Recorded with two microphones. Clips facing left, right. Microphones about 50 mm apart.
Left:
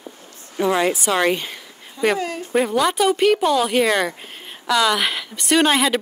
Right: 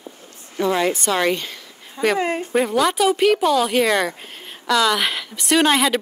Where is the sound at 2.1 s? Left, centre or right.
Right.